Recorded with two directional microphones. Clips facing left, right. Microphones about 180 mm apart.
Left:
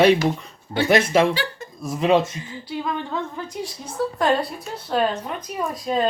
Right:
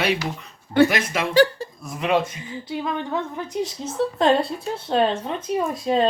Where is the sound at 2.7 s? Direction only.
20° right (ahead or behind).